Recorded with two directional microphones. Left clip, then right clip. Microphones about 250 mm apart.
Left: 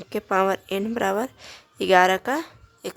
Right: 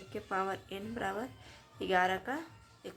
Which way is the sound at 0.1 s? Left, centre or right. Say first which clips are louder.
Left 14 dB; left.